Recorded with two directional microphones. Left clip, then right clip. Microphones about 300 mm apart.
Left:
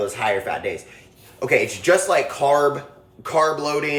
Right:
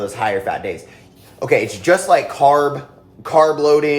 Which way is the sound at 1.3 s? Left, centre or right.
Centre.